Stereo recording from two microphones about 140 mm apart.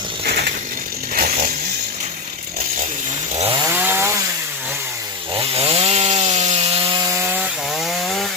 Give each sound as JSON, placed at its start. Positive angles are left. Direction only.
{"t": 0.3, "sound": "ratchet", "side_deg": -90}
{"t": 3.6, "sound": "chainsaw", "side_deg": -15}
{"t": 5.4, "sound": "wood", "side_deg": -45}
{"t": 6.3, "sound": "rub", "side_deg": -55}
{"t": 7.3, "sound": "wood", "side_deg": 0}